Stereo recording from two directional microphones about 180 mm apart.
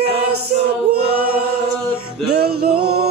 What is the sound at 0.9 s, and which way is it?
Choir, 65° right (ahead or behind).